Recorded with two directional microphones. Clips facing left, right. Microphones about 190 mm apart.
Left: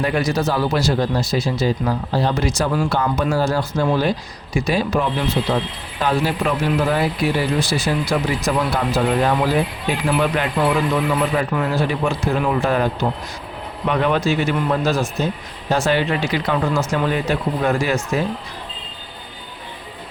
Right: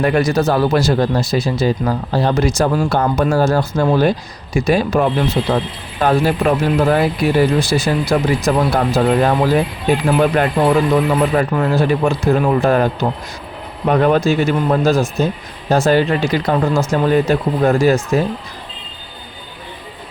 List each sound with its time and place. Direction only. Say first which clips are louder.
0.0 s speech: right 5 dB; 50° right (ahead or behind)